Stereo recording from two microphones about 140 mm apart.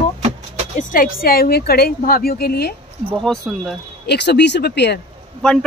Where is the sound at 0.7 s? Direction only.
85° left.